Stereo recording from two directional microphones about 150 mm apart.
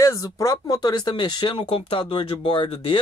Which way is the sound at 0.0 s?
20° left (ahead or behind).